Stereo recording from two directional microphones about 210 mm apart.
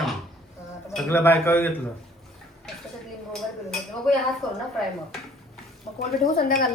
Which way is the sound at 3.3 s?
5° left (ahead or behind).